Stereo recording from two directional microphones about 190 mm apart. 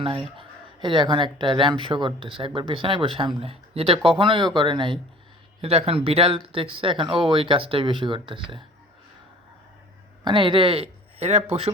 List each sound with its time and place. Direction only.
0.3 s speech: 25° right (ahead or behind)
10.2 s speech: 25° right (ahead or behind)